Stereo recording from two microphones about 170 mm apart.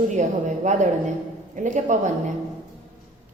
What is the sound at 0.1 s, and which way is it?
A woman's voice, 45° right (ahead or behind).